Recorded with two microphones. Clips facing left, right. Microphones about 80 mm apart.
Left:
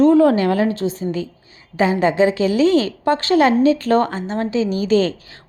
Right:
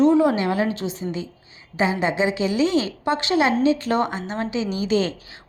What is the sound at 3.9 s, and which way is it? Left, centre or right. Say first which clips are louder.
Speech: left 5 dB; centre.